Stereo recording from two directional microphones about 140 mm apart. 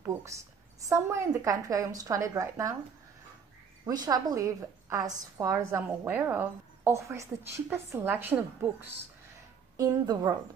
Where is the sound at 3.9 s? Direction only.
30° right (ahead or behind).